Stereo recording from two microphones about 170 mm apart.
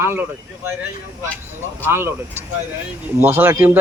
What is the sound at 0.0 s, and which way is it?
Speech, 15° right (ahead or behind).